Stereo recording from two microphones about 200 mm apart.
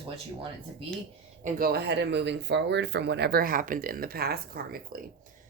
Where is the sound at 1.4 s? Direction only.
50° right (ahead or behind).